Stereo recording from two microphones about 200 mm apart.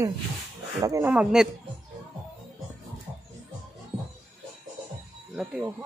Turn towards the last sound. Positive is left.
turn(degrees=-5)  # may be behind; listen again after turning